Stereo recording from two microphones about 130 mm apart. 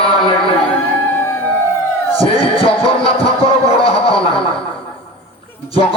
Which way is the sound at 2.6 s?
45° left (ahead or behind).